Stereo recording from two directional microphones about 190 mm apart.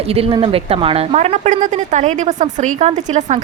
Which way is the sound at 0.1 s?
30° right (ahead or behind).